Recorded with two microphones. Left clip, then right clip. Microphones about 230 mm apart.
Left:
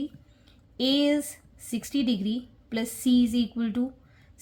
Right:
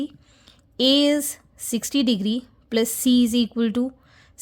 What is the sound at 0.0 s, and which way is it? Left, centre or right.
A woman's voice, right.